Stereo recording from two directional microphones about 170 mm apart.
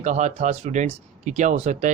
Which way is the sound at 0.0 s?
45° right (ahead or behind).